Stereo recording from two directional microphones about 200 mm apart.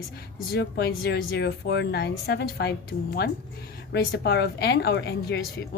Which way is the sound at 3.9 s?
55° left (ahead or behind).